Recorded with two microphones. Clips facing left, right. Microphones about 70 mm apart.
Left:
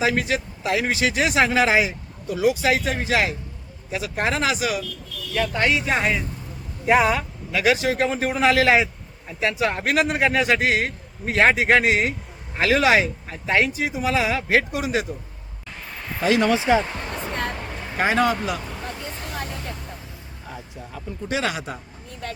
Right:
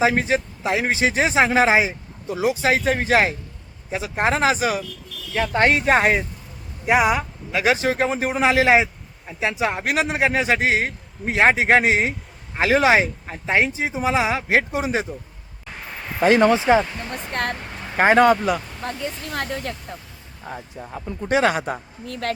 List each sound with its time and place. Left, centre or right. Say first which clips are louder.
0.0 s a man's voice: right 3 dB; right
3.9 s speech: right 3 dB; right
6.8 s speech: even; centre
7.5 s a man's voice: right 1 dB; right
16.2 s speech: right 4 dB; right
16.7 s a man's voice: right 1 dB; right
17.9 s speech: right 6 dB; right
18.9 s speech: right 8 dB; right
21.2 s speech: right 6 dB; right
22.0 s speech: right 7 dB; right